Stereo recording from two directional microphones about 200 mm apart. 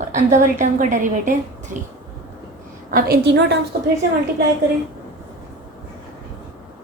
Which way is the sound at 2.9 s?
50° right (ahead or behind).